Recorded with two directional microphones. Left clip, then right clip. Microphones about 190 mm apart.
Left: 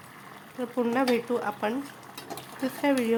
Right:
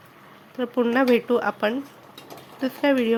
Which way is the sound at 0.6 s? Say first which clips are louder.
Right 5 dB; 20° right (ahead or behind).